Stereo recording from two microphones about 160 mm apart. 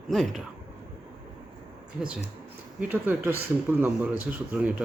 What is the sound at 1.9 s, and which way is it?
Speech, 5° right (ahead or behind).